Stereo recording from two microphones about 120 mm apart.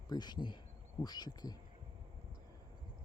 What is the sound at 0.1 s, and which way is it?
Speech, 35° left (ahead or behind).